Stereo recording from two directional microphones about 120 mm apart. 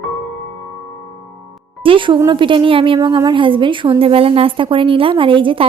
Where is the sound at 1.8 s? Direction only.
45° right (ahead or behind).